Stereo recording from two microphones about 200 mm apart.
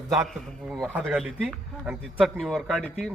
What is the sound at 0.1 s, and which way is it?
A man's voice, centre (ahead or behind).